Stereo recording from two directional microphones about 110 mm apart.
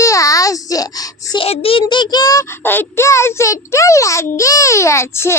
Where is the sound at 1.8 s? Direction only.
40° left (ahead or behind).